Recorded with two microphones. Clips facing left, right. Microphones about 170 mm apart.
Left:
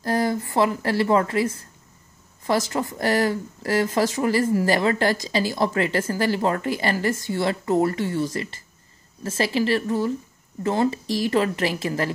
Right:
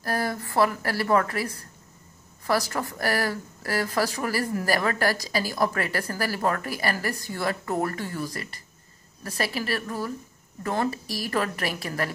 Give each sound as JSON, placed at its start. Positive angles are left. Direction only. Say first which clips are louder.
{"t": 0.0, "sound": "speech", "louder": "left 5 dB", "side_deg": 20}